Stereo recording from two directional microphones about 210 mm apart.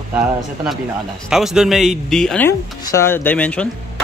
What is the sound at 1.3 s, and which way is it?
Speech, centre (ahead or behind).